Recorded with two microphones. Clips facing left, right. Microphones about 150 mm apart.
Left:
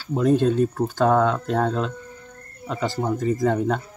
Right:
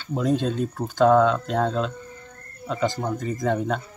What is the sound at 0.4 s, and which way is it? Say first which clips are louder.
Speech: left 6 dB; 10° left (ahead or behind).